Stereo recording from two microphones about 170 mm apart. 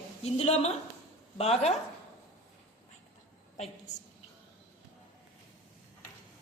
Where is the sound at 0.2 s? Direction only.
40° left (ahead or behind).